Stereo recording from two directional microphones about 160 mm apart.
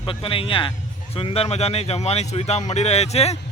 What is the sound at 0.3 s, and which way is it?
Speech, 35° left (ahead or behind).